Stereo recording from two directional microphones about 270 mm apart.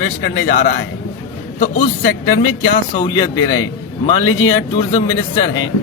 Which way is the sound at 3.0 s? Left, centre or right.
Centre.